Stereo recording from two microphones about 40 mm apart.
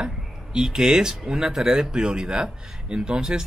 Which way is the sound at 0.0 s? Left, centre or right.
Centre.